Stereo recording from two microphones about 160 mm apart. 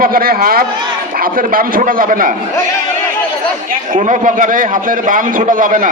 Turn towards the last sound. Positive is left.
turn(degrees=-55)  # may be behind; listen again after turning